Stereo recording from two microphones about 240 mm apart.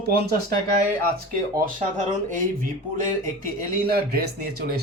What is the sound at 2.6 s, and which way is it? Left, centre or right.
Speech, right.